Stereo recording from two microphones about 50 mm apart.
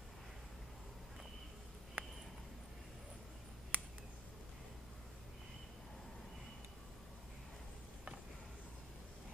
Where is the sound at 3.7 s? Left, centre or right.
Right.